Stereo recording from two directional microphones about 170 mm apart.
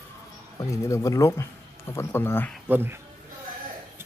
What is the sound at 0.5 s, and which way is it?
Speech, 20° left (ahead or behind).